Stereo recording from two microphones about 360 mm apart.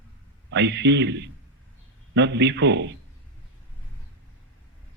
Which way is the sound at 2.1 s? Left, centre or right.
Right.